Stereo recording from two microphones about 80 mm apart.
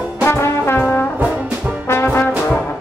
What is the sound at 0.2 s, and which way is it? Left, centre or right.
Brass instrument, left.